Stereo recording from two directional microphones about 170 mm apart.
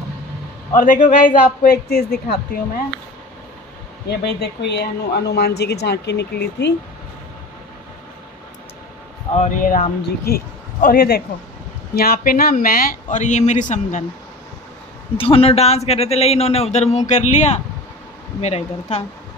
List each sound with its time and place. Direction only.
0.7 s speech: 50° left (ahead or behind)
4.1 s speech: 80° left
9.4 s a man's voice: 50° left (ahead or behind)
15.1 s a man's voice: 35° left (ahead or behind)